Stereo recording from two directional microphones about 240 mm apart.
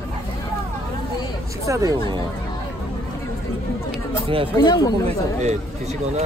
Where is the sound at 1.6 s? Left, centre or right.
Centre.